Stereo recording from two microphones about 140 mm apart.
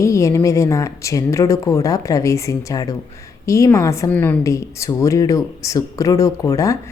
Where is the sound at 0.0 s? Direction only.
20° left (ahead or behind).